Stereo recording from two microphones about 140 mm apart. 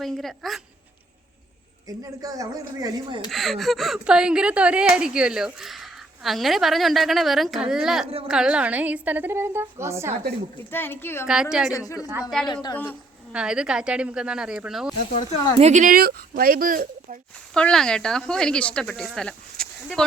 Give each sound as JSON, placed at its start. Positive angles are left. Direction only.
{"t": 0.0, "sound": "speech", "side_deg": 0}
{"t": 1.9, "sound": "speech", "side_deg": -25}
{"t": 3.3, "sound": "a woman's voice", "side_deg": 0}
{"t": 10.6, "sound": "a child's voice", "side_deg": 15}
{"t": 12.3, "sound": "speech", "side_deg": 5}
{"t": 12.7, "sound": "a child's voice", "side_deg": 15}
{"t": 13.3, "sound": "a woman's voice", "side_deg": -5}
{"t": 15.5, "sound": "speech", "side_deg": -55}
{"t": 17.5, "sound": "speech", "side_deg": 5}